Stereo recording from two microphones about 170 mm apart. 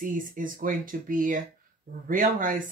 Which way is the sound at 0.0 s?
50° right (ahead or behind).